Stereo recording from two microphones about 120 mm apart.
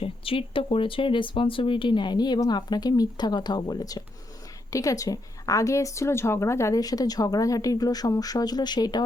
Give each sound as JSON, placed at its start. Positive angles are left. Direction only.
{"t": 0.0, "sound": "a woman's voice", "side_deg": 50}